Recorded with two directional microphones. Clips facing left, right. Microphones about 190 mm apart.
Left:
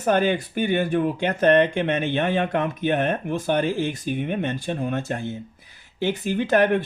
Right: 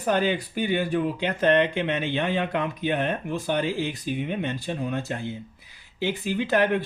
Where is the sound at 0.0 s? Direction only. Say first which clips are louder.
Left 3 dB; 50° left (ahead or behind).